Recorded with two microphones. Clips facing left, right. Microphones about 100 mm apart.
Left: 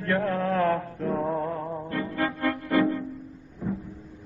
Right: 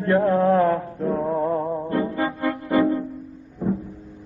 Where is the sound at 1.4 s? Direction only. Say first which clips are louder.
Right 7 dB; 25° right (ahead or behind).